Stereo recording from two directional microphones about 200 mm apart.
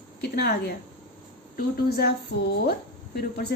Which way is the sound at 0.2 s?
55° left (ahead or behind).